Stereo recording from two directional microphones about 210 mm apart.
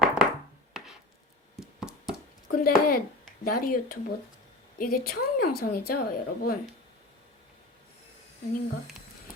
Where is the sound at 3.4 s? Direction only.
45° left (ahead or behind).